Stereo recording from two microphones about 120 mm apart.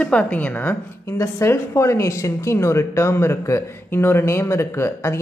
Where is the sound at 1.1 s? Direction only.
25° left (ahead or behind).